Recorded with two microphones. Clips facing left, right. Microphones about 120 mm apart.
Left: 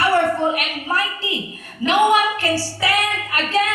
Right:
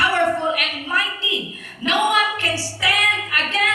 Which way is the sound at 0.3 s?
40° left (ahead or behind).